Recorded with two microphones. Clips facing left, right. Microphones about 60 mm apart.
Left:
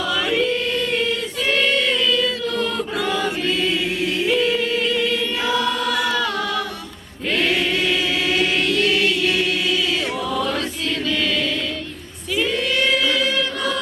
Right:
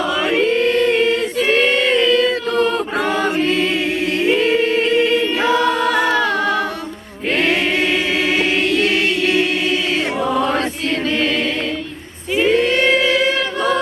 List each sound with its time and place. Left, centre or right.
0.0 s choir: right
2.9 s choir: right
4.3 s choir: right
8.4 s choir: right
8.6 s choir: right
10.2 s chant: right
12.3 s choir: right